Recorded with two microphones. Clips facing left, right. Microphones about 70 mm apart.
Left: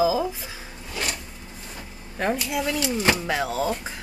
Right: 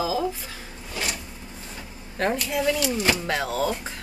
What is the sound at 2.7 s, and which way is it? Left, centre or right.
Speech, left.